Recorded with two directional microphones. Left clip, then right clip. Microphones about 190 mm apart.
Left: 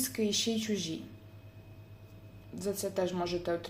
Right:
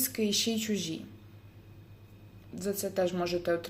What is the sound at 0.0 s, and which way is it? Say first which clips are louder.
Speech: right 2 dB; 15° right (ahead or behind).